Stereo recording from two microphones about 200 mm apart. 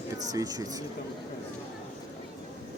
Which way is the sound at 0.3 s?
20° right (ahead or behind).